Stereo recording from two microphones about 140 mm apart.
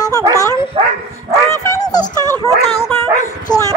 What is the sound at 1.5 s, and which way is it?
Dog, 20° left (ahead or behind).